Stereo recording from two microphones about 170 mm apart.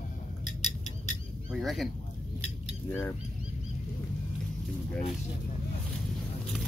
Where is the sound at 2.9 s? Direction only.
15° left (ahead or behind).